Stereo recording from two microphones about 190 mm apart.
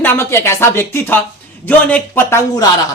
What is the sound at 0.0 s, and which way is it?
Speech, 10° left (ahead or behind).